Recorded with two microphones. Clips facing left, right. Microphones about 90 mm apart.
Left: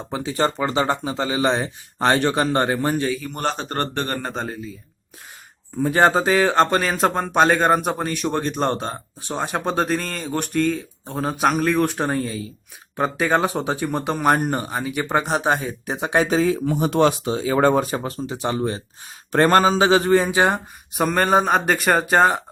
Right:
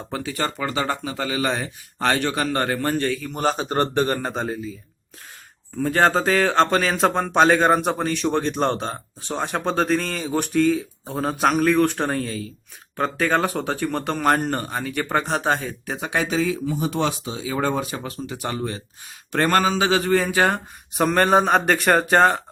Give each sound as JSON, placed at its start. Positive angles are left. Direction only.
{"t": 0.1, "sound": "speech", "side_deg": 25}
{"t": 5.7, "sound": "speech", "side_deg": 15}
{"t": 16.2, "sound": "speech", "side_deg": 40}
{"t": 16.6, "sound": "speech", "side_deg": 55}
{"t": 20.9, "sound": "speech", "side_deg": 0}